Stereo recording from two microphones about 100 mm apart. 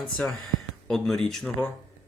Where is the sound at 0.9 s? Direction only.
5° left (ahead or behind).